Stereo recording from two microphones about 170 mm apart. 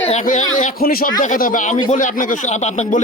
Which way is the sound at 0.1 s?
45° left (ahead or behind).